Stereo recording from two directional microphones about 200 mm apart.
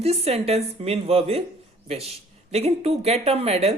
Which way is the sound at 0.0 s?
30° right (ahead or behind).